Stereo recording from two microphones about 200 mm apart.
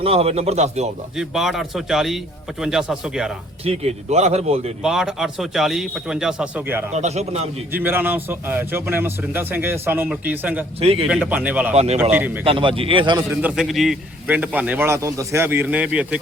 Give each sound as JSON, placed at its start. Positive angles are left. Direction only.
{"t": 0.0, "sound": "speech", "side_deg": -30}
{"t": 1.1, "sound": "a man's voice", "side_deg": 0}
{"t": 3.6, "sound": "speech", "side_deg": -30}
{"t": 4.8, "sound": "a man's voice", "side_deg": -5}
{"t": 6.9, "sound": "speech", "side_deg": -35}
{"t": 7.7, "sound": "speech", "side_deg": -10}
{"t": 10.8, "sound": "a man's voice", "side_deg": -30}
{"t": 11.1, "sound": "speech", "side_deg": -5}
{"t": 11.7, "sound": "speech", "side_deg": -35}
{"t": 12.1, "sound": "speech", "side_deg": -10}
{"t": 12.5, "sound": "a man's voice", "side_deg": -25}
{"t": 13.3, "sound": "speech", "side_deg": -5}